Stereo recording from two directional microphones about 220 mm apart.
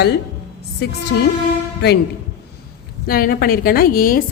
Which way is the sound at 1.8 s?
50° left (ahead or behind).